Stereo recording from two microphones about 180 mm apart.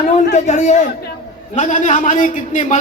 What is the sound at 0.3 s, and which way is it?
A man's voice, 40° left (ahead or behind).